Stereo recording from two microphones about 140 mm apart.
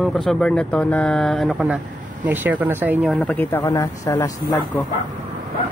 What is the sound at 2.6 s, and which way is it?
Speech, 15° right (ahead or behind).